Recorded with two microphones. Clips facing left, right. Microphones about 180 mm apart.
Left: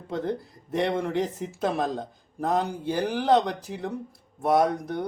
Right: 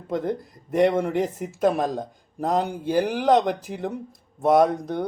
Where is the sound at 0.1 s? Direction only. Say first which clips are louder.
Right 3 dB; 15° right (ahead or behind).